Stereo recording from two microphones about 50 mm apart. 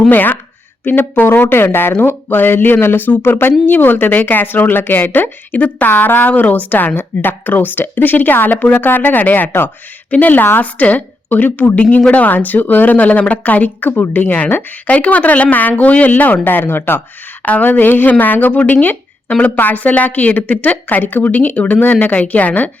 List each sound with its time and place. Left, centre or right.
0.1 s speech: left
1.9 s speech: left
21.3 s speech: left